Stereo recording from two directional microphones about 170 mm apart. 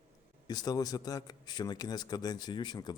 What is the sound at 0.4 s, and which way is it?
A man's voice, 25° left (ahead or behind).